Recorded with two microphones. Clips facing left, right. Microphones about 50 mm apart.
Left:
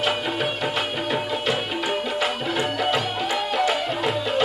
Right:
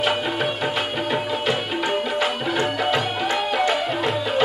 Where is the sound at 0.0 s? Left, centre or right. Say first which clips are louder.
Right 2 dB; centre.